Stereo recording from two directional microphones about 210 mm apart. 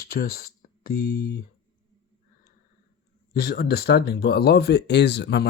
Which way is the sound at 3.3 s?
45° left (ahead or behind).